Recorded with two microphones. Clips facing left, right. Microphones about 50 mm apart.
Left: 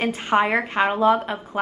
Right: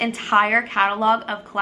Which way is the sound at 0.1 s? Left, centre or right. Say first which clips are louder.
Right 4 dB; centre.